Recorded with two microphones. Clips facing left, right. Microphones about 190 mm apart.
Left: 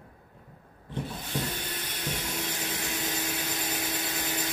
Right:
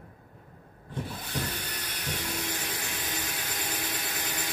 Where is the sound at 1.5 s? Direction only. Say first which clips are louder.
Left 2 dB; 25° left (ahead or behind).